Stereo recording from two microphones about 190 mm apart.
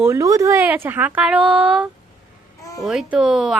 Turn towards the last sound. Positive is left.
turn(degrees=-5)  # may be behind; listen again after turning